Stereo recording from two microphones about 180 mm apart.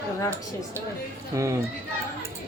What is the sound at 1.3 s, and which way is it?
Speech, 15° right (ahead or behind).